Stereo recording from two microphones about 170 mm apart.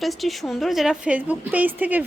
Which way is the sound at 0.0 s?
Centre (ahead or behind).